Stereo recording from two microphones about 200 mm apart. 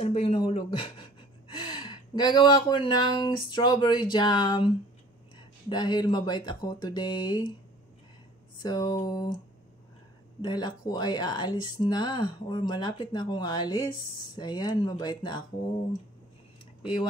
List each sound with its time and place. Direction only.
0.0 s speech: 30° left (ahead or behind)
8.6 s speech: 20° left (ahead or behind)
10.4 s speech: 20° left (ahead or behind)